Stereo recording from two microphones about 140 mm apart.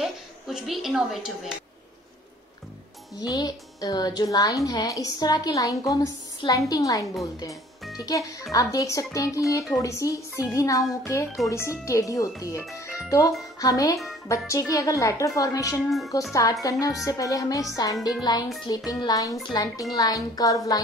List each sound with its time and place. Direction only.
0.0 s a woman's voice: centre (ahead or behind)
3.2 s a woman's voice: 25° left (ahead or behind)